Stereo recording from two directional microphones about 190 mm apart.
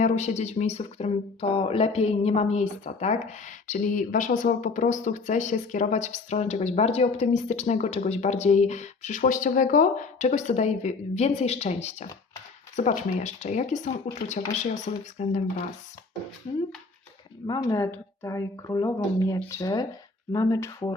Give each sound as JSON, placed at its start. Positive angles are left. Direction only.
{"t": 0.0, "sound": "speech", "side_deg": 35}
{"t": 17.4, "sound": "speech", "side_deg": 20}